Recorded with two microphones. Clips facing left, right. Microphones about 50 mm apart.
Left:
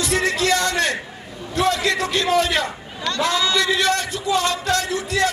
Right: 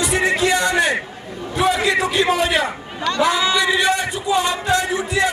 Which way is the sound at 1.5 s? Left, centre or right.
Centre.